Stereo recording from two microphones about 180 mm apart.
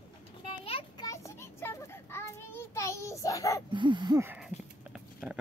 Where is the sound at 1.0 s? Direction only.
15° left (ahead or behind).